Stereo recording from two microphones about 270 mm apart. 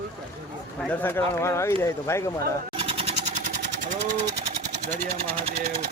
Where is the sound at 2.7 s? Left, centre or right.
Right.